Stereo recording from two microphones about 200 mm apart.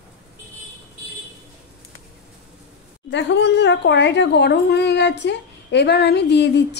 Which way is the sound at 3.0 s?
60° left (ahead or behind).